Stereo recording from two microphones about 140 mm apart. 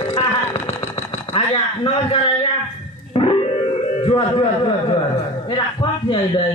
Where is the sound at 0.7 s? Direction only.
40° left (ahead or behind).